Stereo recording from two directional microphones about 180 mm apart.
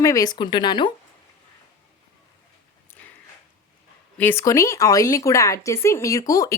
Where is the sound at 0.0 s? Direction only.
20° left (ahead or behind).